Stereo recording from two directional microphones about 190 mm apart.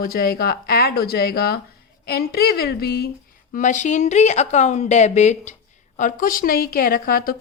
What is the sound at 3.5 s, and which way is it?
Speech, 40° left (ahead or behind).